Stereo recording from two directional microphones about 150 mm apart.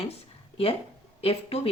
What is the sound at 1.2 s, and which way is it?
Speech, 40° left (ahead or behind).